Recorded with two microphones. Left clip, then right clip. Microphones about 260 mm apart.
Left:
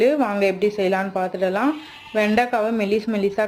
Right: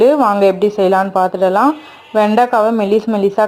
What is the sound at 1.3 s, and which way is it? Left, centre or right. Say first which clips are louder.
Speech: right 9 dB; centre.